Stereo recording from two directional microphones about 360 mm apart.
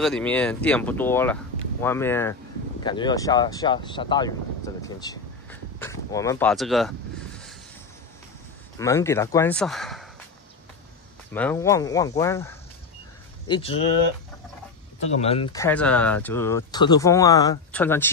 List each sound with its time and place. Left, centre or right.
0.0 s speech: centre
8.7 s speech: centre
11.3 s speech: centre
15.1 s speech: centre